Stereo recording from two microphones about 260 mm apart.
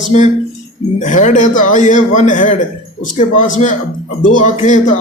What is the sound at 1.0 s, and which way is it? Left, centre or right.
Speech, left.